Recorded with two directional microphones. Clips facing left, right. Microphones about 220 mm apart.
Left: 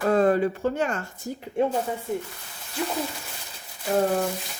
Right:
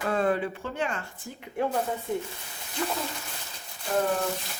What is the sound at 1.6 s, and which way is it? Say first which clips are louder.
Speech: left 5 dB; 25° left (ahead or behind).